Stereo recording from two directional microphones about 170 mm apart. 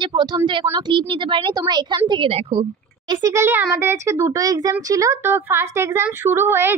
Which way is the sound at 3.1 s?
20° right (ahead or behind).